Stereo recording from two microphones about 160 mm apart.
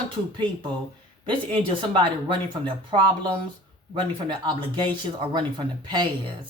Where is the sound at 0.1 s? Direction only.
30° right (ahead or behind).